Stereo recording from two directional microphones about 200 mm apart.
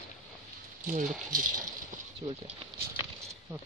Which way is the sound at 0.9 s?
45° right (ahead or behind).